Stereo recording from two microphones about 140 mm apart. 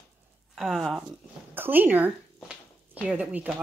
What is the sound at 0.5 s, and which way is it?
Speech, centre (ahead or behind).